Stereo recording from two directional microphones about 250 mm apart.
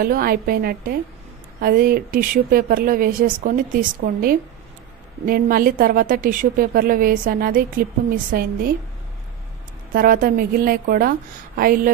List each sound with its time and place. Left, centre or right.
0.0 s a woman's voice: right
9.9 s a woman's voice: right